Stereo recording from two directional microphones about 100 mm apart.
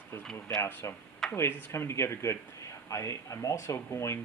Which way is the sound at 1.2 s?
5° left (ahead or behind).